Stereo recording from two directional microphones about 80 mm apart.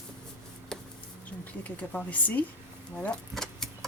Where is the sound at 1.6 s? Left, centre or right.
Centre.